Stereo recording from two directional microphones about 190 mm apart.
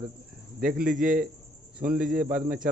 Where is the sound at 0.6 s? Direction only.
50° right (ahead or behind).